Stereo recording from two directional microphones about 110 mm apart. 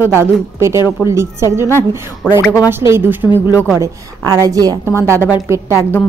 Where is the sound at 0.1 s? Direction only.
25° right (ahead or behind).